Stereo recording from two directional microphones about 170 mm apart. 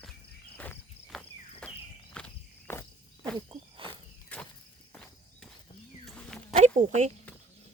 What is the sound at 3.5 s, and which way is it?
Cricket, 30° right (ahead or behind).